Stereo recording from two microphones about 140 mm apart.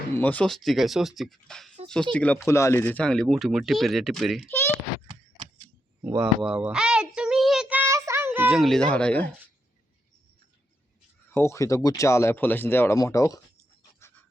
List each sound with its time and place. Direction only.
0.2 s speech: 10° left (ahead or behind)
4.4 s speech: 15° left (ahead or behind)
6.1 s child singing: 5° right (ahead or behind)
8.4 s speech: centre (ahead or behind)
11.3 s speech: 20° left (ahead or behind)